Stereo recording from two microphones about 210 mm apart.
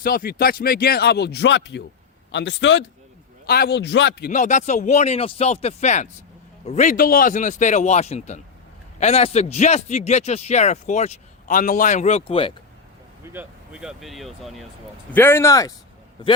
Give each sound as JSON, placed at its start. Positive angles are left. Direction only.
{"t": 0.0, "sound": "a man's voice", "side_deg": 45}
{"t": 3.4, "sound": "speech", "side_deg": 50}
{"t": 4.3, "sound": "a man's voice", "side_deg": 35}
{"t": 13.3, "sound": "speech", "side_deg": -5}
{"t": 15.1, "sound": "speech", "side_deg": 10}